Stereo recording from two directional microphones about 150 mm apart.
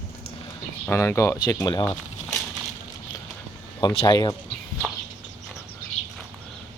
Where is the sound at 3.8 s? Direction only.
35° left (ahead or behind).